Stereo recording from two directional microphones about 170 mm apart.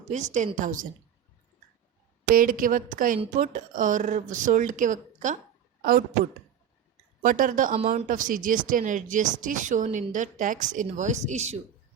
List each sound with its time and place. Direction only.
0.1 s speech: 45° right (ahead or behind)
2.3 s speech: 55° right (ahead or behind)
7.2 s speech: 50° right (ahead or behind)